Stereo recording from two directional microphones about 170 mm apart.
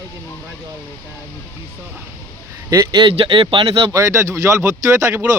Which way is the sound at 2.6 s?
20° right (ahead or behind).